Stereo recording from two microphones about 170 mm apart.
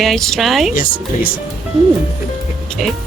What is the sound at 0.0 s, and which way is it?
Speech, centre (ahead or behind).